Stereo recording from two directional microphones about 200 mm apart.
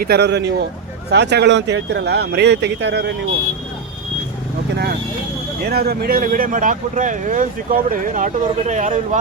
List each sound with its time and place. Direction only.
0.0 s speech: 55° right (ahead or behind)
4.7 s speech: 55° right (ahead or behind); by 9.0 s 35° right (ahead or behind)